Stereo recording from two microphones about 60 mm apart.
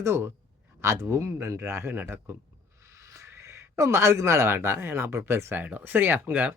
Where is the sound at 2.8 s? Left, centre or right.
Right.